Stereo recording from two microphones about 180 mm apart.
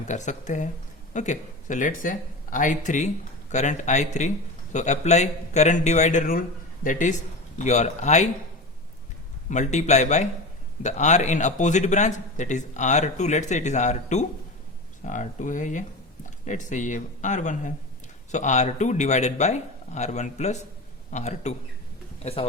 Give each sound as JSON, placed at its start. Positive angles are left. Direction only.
{"t": 0.0, "sound": "a man's voice", "side_deg": 40}
{"t": 9.5, "sound": "a man's voice", "side_deg": 40}